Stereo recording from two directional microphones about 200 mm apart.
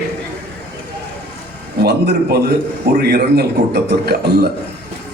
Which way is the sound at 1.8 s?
55° right (ahead or behind).